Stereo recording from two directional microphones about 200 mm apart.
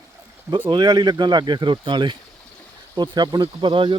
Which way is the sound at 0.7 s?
20° right (ahead or behind).